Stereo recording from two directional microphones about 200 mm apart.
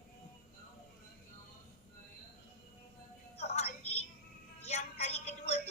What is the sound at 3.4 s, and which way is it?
Music, 30° left (ahead or behind).